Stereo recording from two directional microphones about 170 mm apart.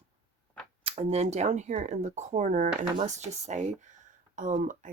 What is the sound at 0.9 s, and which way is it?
Speech, 35° right (ahead or behind).